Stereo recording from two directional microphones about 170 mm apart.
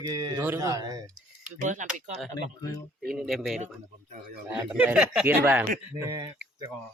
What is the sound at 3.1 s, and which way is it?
Speech, centre (ahead or behind).